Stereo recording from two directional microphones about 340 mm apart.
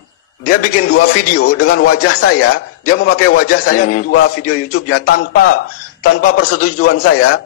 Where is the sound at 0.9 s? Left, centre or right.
Left.